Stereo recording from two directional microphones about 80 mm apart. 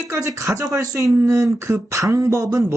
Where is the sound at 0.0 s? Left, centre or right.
Right.